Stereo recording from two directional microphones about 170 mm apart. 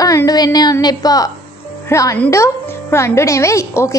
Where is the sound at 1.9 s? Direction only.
20° left (ahead or behind).